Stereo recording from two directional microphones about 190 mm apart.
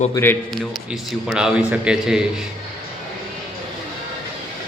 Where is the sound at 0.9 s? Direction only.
5° right (ahead or behind).